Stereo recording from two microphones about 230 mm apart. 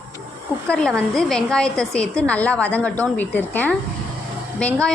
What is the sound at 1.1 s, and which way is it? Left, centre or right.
A woman's voice, centre.